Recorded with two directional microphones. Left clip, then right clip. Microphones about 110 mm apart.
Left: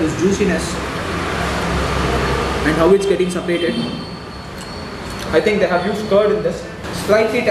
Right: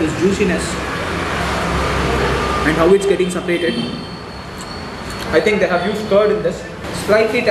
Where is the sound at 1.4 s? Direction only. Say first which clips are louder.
Right 1 dB; 15° right (ahead or behind).